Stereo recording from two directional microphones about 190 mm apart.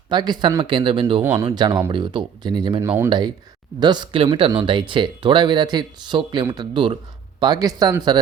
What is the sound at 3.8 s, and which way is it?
Speech, 20° right (ahead or behind).